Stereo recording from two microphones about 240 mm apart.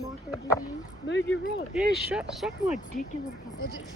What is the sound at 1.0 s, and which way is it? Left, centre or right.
Speech, left.